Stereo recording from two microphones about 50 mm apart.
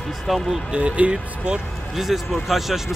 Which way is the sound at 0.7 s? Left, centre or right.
Right.